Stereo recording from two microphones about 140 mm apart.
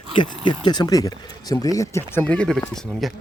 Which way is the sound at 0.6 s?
30° left (ahead or behind).